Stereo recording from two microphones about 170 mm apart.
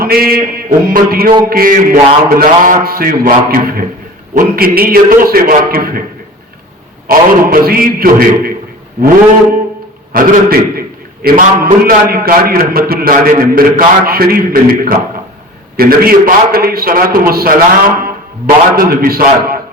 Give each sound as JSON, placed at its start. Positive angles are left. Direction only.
{"t": 0.0, "sound": "a man's voice", "side_deg": -60}
{"t": 7.1, "sound": "a man's voice", "side_deg": -60}
{"t": 10.1, "sound": "a man's voice", "side_deg": -60}